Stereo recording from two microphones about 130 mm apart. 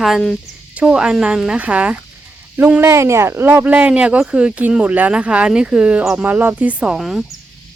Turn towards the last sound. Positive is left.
turn(degrees=0)  # may be behind; listen again after turning